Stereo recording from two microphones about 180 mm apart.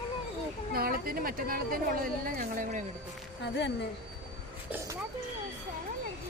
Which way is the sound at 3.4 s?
75° left (ahead or behind).